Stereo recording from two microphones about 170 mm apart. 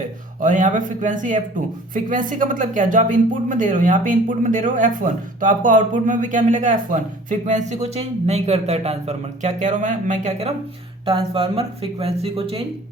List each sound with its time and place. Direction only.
0.4 s speech: 50° right (ahead or behind)
11.0 s speech: 30° right (ahead or behind)